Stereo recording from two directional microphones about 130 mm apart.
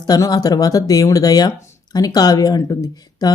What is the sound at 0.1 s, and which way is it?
Speech, 30° left (ahead or behind).